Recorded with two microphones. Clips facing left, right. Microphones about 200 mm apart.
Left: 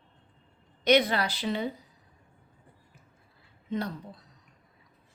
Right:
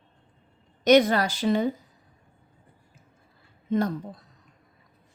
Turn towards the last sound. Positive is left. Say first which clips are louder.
# right 7 dB
turn(degrees=-50)  # may be behind; listen again after turning